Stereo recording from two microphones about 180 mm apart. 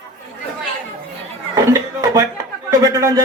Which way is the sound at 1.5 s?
20° right (ahead or behind).